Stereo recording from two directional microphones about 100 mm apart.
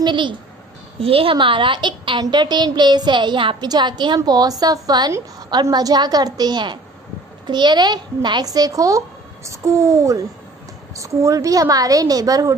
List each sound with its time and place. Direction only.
0.0 s a woman's voice: 50° right (ahead or behind)
1.0 s a woman's voice: 70° right (ahead or behind); by 3.5 s 55° right (ahead or behind)
3.6 s a woman's voice: 45° right (ahead or behind)